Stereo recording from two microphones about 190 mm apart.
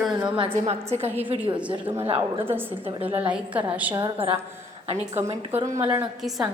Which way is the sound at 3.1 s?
30° right (ahead or behind).